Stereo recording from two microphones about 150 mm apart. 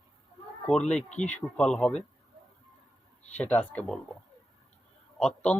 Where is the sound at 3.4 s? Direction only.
10° left (ahead or behind).